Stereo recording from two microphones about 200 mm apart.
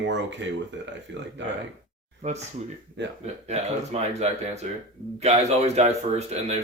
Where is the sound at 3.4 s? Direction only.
30° right (ahead or behind).